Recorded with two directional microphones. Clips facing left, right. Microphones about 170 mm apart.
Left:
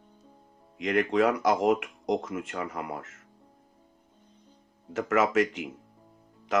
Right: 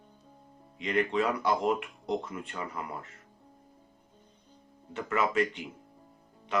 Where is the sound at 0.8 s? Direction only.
90° left.